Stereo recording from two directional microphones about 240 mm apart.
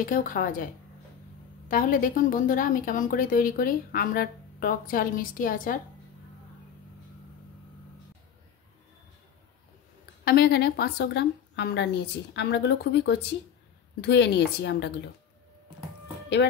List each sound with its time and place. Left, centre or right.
0.0 s a woman's voice: left
1.7 s a woman's voice: left
10.2 s a woman's voice: left